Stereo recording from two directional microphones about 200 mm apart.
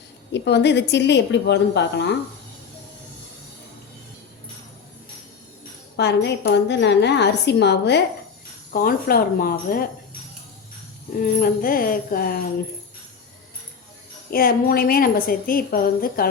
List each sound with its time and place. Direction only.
0.3 s a woman's voice: 60° left (ahead or behind)
6.0 s a woman's voice: 55° left (ahead or behind)
11.2 s a woman's voice: 45° left (ahead or behind)
14.3 s a woman's voice: 50° left (ahead or behind)